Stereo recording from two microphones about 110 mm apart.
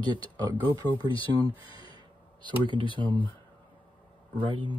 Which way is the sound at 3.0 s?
45° right (ahead or behind).